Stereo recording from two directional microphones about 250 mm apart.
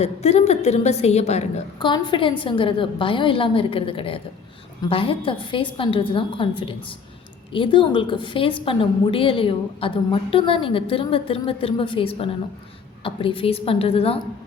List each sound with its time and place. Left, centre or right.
0.0 s a woman's voice: left